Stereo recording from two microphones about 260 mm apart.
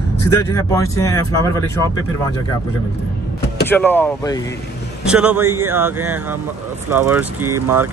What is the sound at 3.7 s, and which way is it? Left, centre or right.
Speech, centre.